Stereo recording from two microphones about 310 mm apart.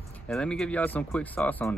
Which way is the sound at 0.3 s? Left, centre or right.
Centre.